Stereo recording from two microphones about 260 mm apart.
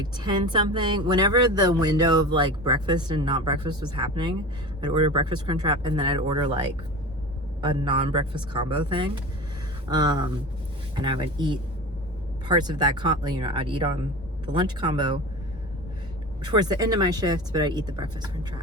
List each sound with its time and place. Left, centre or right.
0.0 s a woman's voice: centre
7.6 s a woman's voice: centre
16.4 s a woman's voice: centre